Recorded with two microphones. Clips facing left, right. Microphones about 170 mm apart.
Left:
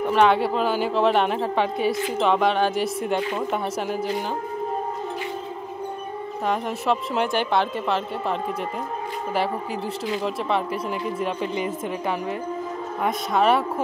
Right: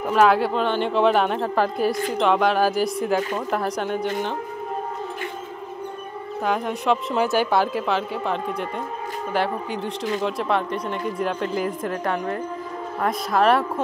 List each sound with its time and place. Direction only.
0.0 s speech: centre (ahead or behind)
6.4 s speech: centre (ahead or behind)